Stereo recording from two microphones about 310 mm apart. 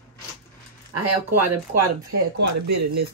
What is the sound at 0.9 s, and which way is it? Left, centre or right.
Speech, right.